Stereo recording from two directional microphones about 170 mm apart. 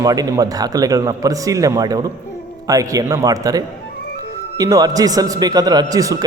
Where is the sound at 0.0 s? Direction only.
20° right (ahead or behind).